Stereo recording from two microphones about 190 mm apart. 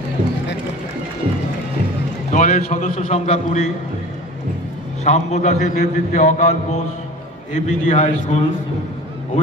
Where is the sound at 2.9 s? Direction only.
30° left (ahead or behind).